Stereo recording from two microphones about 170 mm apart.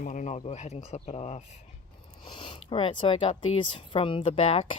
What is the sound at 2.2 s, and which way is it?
Speech, 30° left (ahead or behind).